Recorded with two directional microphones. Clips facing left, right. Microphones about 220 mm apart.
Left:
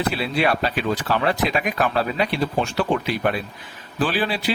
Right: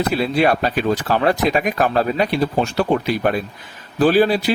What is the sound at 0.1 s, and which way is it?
A man's voice, 45° right (ahead or behind).